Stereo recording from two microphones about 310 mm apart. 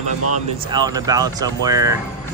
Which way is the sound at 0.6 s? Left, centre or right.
Centre.